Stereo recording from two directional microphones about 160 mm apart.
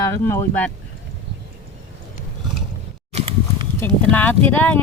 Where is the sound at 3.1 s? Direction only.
35° right (ahead or behind).